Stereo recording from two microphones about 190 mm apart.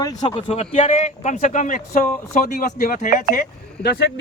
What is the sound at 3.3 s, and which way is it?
Speech, 55° left (ahead or behind).